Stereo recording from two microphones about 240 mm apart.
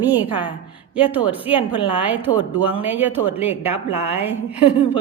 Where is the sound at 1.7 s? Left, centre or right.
Centre.